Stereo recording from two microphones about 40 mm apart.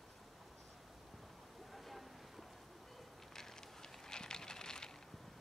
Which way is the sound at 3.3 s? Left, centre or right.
Centre.